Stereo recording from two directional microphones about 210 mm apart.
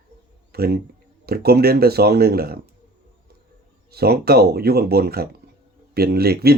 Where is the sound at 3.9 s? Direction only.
50° right (ahead or behind).